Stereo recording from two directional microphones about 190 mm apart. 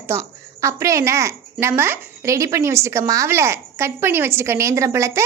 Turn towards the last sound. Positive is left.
turn(degrees=-15)  # may be behind; listen again after turning